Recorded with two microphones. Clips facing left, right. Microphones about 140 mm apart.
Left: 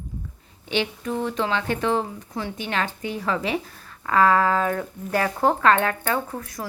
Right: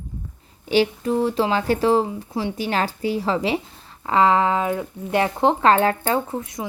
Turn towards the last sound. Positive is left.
turn(degrees=-20)  # may be behind; listen again after turning